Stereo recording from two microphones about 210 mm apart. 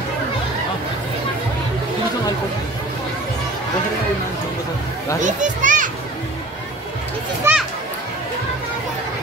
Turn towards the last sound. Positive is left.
turn(degrees=-10)  # may be behind; listen again after turning